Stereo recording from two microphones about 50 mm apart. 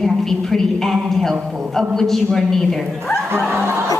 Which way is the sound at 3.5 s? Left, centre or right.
Right.